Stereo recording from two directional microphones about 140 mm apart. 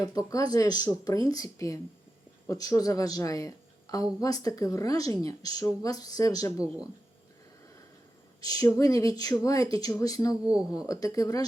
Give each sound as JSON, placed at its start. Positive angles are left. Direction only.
{"t": 0.1, "sound": "speech", "side_deg": 25}
{"t": 6.6, "sound": "speech", "side_deg": -5}
{"t": 8.4, "sound": "speech", "side_deg": 25}
{"t": 10.4, "sound": "speech", "side_deg": -5}
{"t": 10.8, "sound": "speech", "side_deg": 25}